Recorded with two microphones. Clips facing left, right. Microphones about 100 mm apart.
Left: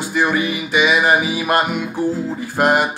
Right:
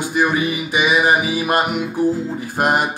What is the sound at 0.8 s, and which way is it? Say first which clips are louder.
Music: left 1 dB; 15° right (ahead or behind).